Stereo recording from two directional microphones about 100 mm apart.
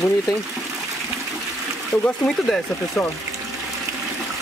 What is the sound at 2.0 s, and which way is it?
Speech, 10° left (ahead or behind).